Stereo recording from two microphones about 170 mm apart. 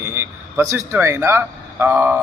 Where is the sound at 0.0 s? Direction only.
15° right (ahead or behind).